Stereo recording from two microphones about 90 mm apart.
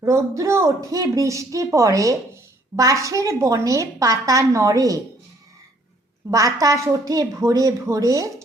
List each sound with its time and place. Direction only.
0.0 s a woman's voice: 35° right (ahead or behind)
6.3 s a woman's voice: 40° right (ahead or behind)